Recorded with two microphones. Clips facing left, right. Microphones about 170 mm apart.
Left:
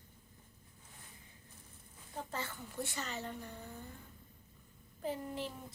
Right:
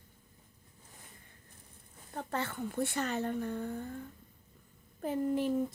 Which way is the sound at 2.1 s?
60° right (ahead or behind).